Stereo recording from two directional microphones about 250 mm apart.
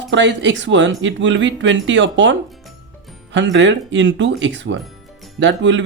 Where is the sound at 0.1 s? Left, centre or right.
Right.